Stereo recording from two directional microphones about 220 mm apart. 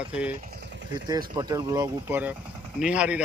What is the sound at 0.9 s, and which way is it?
Speech, 20° right (ahead or behind).